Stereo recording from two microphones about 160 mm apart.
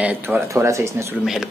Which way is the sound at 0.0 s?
10° right (ahead or behind).